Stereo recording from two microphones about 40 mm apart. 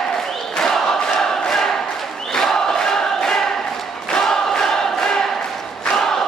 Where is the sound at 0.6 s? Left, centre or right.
Centre.